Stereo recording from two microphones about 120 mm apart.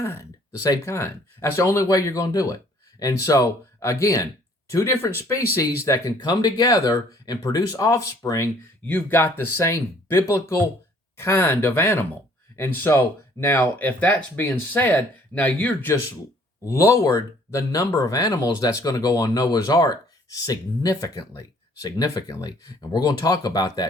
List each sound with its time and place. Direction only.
0.0 s speech: 25° left (ahead or behind)
8.9 s speech: 15° left (ahead or behind); by 23.9 s 35° left (ahead or behind)